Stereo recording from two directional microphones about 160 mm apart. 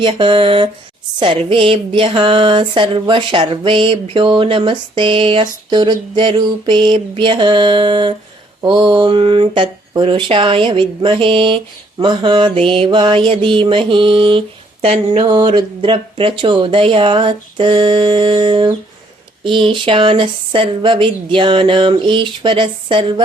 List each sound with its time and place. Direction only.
0.0 s speech: 30° right (ahead or behind)
15.3 s speech: 30° right (ahead or behind)